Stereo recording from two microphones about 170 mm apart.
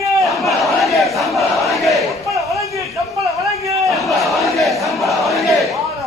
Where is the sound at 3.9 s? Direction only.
Centre (ahead or behind).